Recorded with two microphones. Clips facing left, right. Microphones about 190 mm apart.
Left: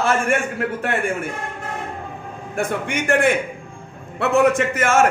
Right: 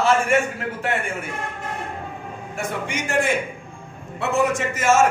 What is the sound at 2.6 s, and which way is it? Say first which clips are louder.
A man's voice: left 5 dB; 55° left (ahead or behind).